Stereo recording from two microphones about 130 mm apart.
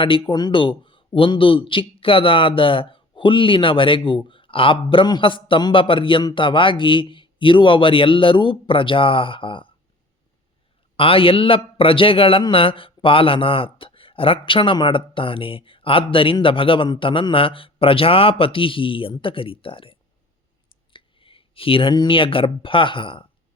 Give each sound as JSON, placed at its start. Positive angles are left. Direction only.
{"t": 0.0, "sound": "speech", "side_deg": 40}
{"t": 10.9, "sound": "a man's voice", "side_deg": 45}